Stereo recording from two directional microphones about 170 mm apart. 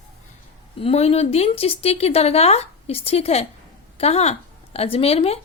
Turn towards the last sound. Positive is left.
turn(degrees=35)  # may be behind; listen again after turning